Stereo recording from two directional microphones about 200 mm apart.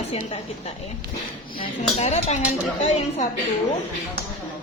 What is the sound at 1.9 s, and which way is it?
Speech, 35° left (ahead or behind).